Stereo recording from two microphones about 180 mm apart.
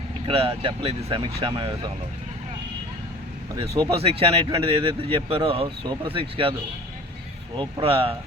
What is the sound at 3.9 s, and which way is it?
Speech, 30° right (ahead or behind).